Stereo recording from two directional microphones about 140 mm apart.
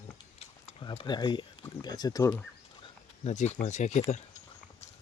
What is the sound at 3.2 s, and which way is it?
Speech, 55° left (ahead or behind).